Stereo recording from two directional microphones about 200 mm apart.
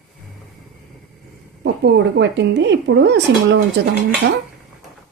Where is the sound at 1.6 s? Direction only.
60° right (ahead or behind).